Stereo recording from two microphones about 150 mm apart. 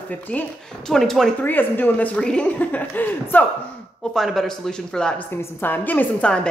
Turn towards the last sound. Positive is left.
turn(degrees=10)  # may be behind; listen again after turning